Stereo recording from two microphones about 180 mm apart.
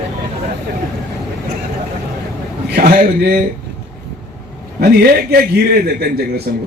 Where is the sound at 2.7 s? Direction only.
50° right (ahead or behind).